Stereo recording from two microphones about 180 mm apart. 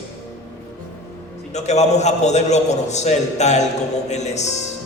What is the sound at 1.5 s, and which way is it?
A man's voice, 40° left (ahead or behind).